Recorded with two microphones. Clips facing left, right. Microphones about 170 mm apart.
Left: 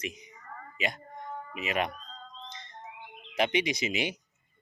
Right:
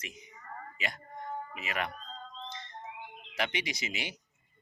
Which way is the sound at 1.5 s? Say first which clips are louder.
Left 7 dB; 20° left (ahead or behind).